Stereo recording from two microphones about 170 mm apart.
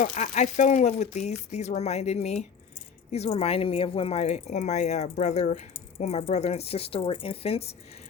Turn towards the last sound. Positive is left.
turn(degrees=35)  # may be behind; listen again after turning